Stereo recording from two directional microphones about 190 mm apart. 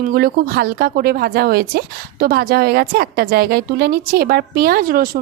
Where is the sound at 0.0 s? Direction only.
50° right (ahead or behind).